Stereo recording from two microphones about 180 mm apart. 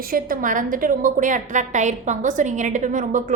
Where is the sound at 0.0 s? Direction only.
50° right (ahead or behind).